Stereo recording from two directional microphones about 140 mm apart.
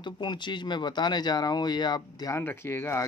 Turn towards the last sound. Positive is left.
turn(degrees=15)  # may be behind; listen again after turning